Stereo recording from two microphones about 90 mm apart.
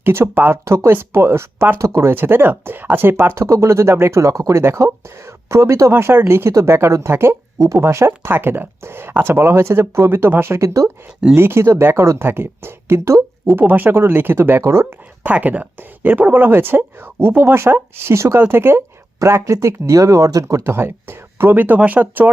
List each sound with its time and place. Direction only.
0.0 s speech: 25° right (ahead or behind)